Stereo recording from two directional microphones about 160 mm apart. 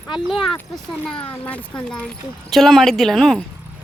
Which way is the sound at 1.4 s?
10° left (ahead or behind).